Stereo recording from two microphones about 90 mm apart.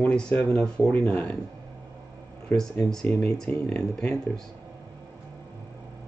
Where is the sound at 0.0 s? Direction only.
15° left (ahead or behind).